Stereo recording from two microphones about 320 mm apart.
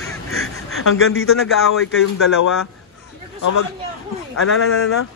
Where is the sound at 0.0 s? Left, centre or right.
Left.